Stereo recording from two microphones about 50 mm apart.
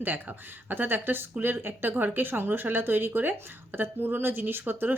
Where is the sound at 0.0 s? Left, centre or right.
Right.